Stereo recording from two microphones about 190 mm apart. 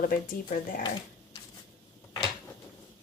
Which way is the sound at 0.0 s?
45° left (ahead or behind).